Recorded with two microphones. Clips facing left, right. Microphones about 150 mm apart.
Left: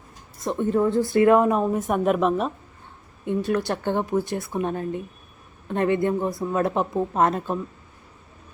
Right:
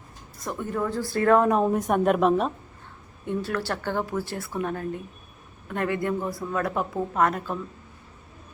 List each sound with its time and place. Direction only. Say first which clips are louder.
0.4 s speech: left 7 dB; 25° left (ahead or behind)
1.5 s a woman's voice: even; centre (ahead or behind)
3.2 s speech: left 4 dB; 20° left (ahead or behind)